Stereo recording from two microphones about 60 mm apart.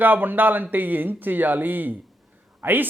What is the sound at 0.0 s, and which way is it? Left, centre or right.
Speech, right.